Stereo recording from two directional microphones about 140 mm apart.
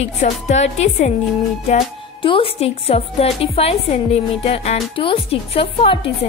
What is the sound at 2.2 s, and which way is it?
A woman's voice, 40° left (ahead or behind).